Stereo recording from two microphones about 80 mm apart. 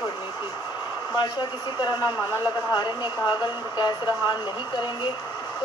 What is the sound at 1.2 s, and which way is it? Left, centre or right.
Speech, left.